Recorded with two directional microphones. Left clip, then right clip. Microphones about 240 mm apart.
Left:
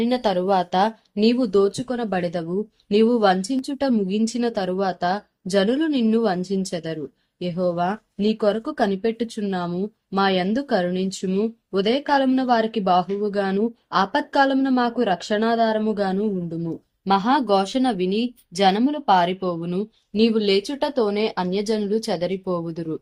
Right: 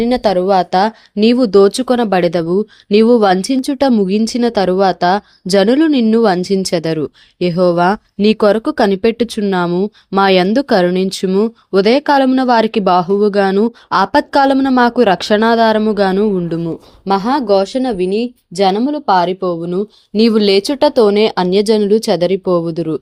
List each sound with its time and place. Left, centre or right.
0.0 s speech: right
20.1 s speech: right